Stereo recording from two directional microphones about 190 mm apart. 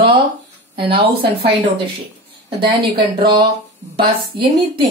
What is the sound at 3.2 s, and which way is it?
Speech, 25° right (ahead or behind).